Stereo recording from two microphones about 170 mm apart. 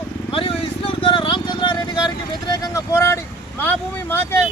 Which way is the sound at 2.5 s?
20° left (ahead or behind).